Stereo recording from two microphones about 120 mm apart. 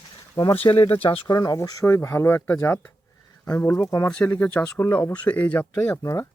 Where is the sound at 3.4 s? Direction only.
30° left (ahead or behind).